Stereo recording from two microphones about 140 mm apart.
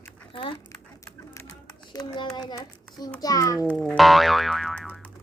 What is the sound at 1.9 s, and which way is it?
A child's voice, 30° left (ahead or behind).